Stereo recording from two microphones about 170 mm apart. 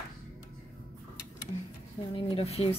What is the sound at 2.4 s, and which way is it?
Speech, 35° left (ahead or behind).